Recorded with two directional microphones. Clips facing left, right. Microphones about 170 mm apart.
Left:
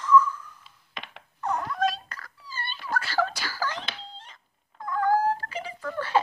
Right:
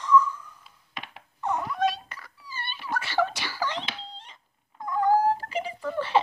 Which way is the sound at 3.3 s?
20° right (ahead or behind).